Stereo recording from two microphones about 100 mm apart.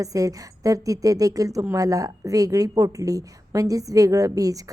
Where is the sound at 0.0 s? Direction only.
35° right (ahead or behind).